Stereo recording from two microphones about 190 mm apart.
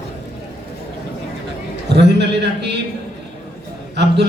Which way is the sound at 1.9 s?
60° right (ahead or behind).